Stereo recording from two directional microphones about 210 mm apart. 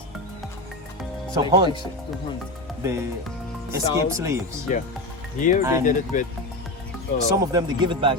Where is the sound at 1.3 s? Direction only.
20° right (ahead or behind).